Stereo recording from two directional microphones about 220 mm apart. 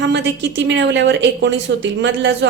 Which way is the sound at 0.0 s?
55° right (ahead or behind).